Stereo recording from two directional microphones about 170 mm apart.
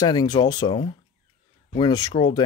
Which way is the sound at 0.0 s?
25° left (ahead or behind).